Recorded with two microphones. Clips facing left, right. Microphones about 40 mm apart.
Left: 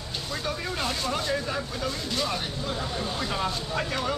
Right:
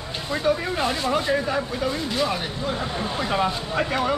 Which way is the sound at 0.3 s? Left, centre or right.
Centre.